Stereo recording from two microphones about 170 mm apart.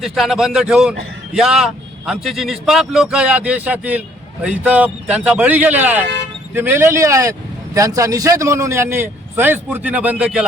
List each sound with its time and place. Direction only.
0.0 s a man's voice: centre (ahead or behind)